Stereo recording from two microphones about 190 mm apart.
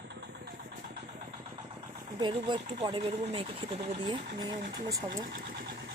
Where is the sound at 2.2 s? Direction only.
25° right (ahead or behind).